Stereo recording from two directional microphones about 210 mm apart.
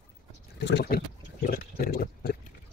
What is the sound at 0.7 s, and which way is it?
Speech, 50° left (ahead or behind).